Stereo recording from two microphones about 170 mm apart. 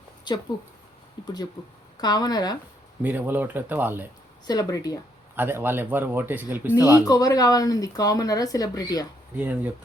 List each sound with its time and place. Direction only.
1.2 s speech: 25° left (ahead or behind)
3.0 s speech: 10° right (ahead or behind)
4.4 s speech: 20° left (ahead or behind)
5.4 s speech: 10° right (ahead or behind)
7.0 s speech: 20° left (ahead or behind)
9.3 s speech: 10° right (ahead or behind)